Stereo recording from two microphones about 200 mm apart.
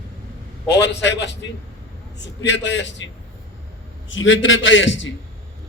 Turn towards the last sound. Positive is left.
turn(degrees=70)  # may be behind; listen again after turning